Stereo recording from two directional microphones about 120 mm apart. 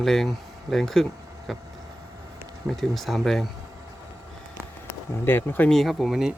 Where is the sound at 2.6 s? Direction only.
Centre (ahead or behind).